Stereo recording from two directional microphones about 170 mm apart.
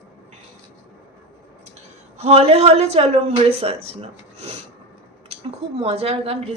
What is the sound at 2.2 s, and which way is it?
A woman's voice, 40° right (ahead or behind).